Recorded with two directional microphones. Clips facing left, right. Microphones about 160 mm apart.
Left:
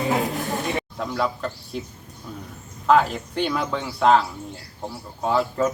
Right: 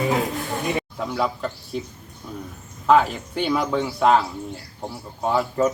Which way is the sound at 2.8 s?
Centre (ahead or behind).